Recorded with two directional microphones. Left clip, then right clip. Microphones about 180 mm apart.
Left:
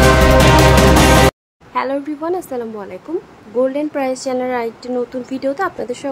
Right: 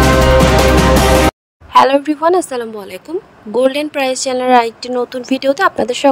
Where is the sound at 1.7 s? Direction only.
40° right (ahead or behind).